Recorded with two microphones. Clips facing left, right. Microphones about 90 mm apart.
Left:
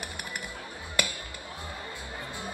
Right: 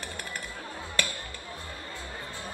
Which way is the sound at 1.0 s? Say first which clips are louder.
Left 1 dB; 15° left (ahead or behind).